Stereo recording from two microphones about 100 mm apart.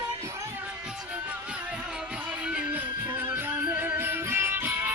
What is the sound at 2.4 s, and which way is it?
Music, 10° right (ahead or behind).